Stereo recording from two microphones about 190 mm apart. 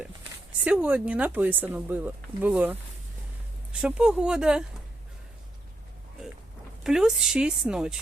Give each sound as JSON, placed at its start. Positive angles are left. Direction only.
{"t": 0.6, "sound": "a woman's voice", "side_deg": -5}
{"t": 6.8, "sound": "a woman's voice", "side_deg": 0}